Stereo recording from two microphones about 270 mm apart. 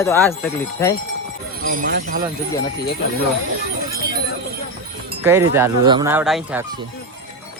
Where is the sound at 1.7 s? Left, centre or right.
Right.